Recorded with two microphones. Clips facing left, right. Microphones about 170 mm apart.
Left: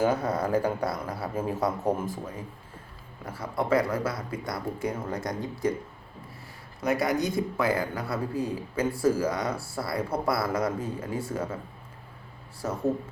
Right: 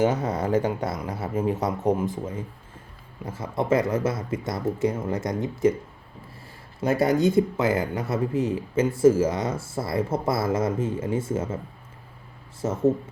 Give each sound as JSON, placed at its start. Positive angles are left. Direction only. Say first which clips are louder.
{"t": 0.0, "sound": "speech", "louder": "right 2 dB", "side_deg": -20}
{"t": 6.8, "sound": "speech", "louder": "right 5 dB", "side_deg": -30}
{"t": 12.6, "sound": "speech", "louder": "right 6 dB", "side_deg": -20}